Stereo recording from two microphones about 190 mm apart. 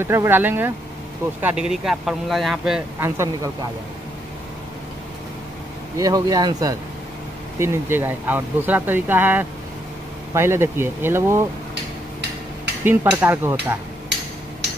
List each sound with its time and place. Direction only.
0.0 s speech: 15° right (ahead or behind)
5.9 s speech: 20° right (ahead or behind)
12.8 s speech: 10° right (ahead or behind)